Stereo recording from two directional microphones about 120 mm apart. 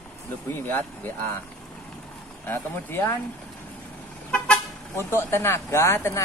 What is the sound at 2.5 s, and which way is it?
Speech, 15° left (ahead or behind).